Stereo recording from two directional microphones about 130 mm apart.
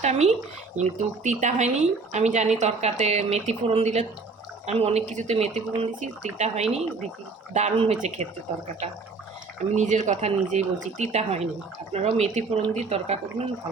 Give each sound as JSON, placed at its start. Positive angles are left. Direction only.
{"t": 0.0, "sound": "speech", "side_deg": -65}
{"t": 9.7, "sound": "speech", "side_deg": -65}